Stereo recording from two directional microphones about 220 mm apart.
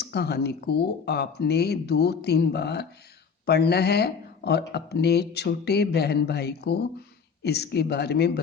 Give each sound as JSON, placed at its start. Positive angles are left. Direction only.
{"t": 0.0, "sound": "speech", "side_deg": 50}